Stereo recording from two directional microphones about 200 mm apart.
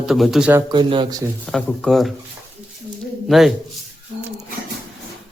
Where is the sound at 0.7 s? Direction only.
25° right (ahead or behind).